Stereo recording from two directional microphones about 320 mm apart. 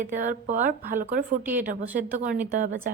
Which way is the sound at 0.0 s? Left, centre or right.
Right.